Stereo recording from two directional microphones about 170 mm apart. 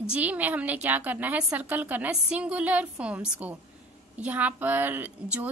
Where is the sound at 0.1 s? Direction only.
10° right (ahead or behind).